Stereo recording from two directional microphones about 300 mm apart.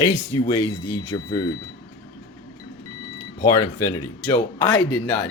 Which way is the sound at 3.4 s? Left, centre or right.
Centre.